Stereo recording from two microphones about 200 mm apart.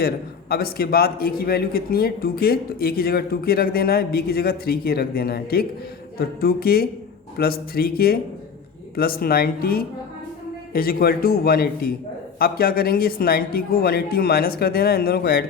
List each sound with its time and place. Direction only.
0.0 s a man's voice: 50° left (ahead or behind)